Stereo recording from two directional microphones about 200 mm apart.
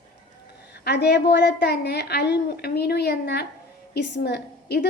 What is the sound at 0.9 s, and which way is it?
A woman's voice, 55° left (ahead or behind).